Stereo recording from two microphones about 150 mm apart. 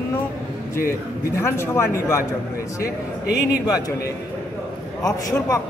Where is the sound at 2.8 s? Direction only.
90° left.